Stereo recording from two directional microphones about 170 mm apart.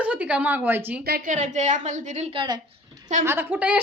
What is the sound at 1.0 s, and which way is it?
Speech, 65° right (ahead or behind).